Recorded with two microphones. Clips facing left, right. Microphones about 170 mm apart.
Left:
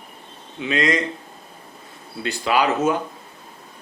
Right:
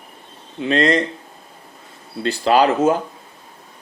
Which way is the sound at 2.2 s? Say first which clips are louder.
Right 5 dB; 35° right (ahead or behind).